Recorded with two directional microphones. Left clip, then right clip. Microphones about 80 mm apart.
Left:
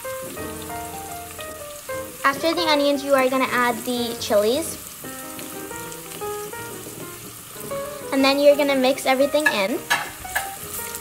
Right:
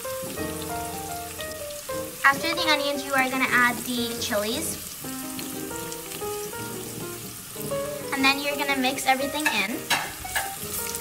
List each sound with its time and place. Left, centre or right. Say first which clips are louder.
2.2 s a child's voice: left 1 dB; left
8.1 s a child's voice: left 8 dB; left